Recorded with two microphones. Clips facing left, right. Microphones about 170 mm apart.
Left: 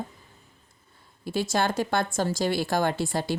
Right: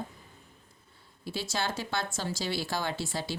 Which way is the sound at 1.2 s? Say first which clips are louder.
Left 8 dB; 50° left (ahead or behind).